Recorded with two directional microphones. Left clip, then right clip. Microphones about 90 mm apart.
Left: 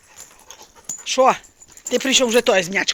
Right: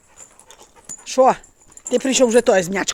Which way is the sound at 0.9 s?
90° right.